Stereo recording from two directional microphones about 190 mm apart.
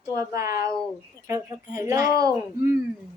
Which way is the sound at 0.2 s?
15° right (ahead or behind).